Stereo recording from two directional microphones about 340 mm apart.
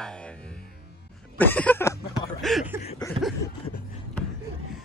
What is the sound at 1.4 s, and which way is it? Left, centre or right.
Throat clearing, centre.